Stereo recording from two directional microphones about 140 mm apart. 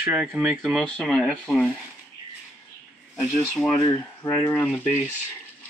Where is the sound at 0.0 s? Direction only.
10° right (ahead or behind); by 1.7 s 5° left (ahead or behind).